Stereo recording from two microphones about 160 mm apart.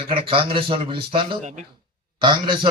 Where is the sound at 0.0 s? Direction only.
35° right (ahead or behind).